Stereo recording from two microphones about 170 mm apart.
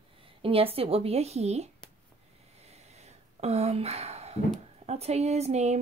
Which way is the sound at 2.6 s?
40° right (ahead or behind).